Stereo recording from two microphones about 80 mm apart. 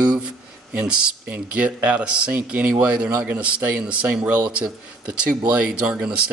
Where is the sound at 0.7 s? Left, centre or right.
Centre.